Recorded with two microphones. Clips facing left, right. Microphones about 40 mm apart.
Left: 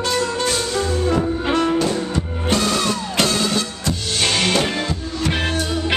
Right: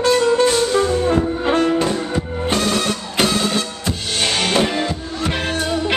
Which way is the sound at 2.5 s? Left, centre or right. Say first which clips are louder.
Even; right.